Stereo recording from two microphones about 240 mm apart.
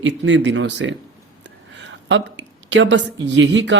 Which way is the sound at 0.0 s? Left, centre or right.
Right.